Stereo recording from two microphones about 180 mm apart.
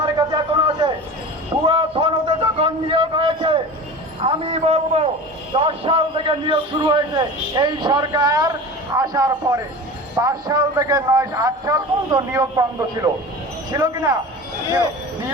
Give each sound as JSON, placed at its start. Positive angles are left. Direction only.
{"t": 0.2, "sound": "a sound", "side_deg": -25}
{"t": 4.2, "sound": "a man's voice", "side_deg": -35}
{"t": 13.7, "sound": "speech", "side_deg": -15}